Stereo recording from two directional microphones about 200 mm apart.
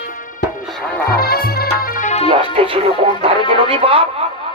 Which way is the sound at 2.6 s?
30° right (ahead or behind).